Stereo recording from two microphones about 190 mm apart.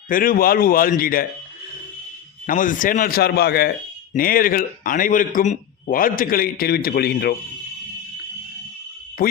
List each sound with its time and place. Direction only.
0.1 s a man's voice: 50° left (ahead or behind)
2.5 s a man's voice: 45° left (ahead or behind)